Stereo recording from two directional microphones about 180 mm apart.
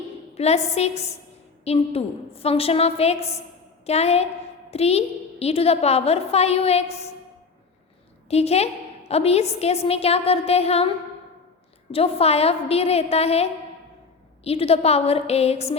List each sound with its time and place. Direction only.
0.3 s a woman's voice: 35° left (ahead or behind)
8.3 s a woman's voice: 35° left (ahead or behind)